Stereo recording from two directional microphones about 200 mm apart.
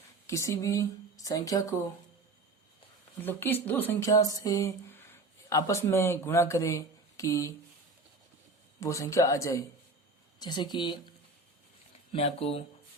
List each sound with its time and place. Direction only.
0.3 s speech: 15° left (ahead or behind)
3.2 s speech: 10° left (ahead or behind)
8.8 s speech: 15° left (ahead or behind)
12.1 s speech: 30° left (ahead or behind)